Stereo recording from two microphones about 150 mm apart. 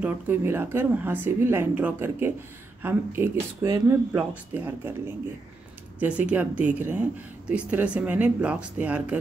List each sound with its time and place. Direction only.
0.0 s speech: 15° right (ahead or behind)